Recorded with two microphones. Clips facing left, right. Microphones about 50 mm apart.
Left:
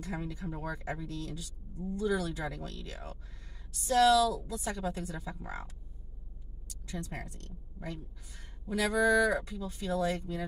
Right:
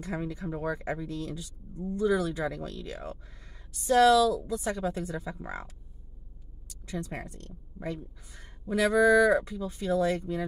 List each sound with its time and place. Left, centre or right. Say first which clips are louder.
0.0 s speech: right 4 dB; right
1.0 s speech: right 4 dB; right
5.1 s speech: right 5 dB; centre
6.9 s speech: right 4 dB; right
8.6 s speech: right 5 dB; centre
10.0 s speech: right 4 dB; right